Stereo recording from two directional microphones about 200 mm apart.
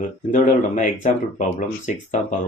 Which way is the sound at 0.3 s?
40° left (ahead or behind).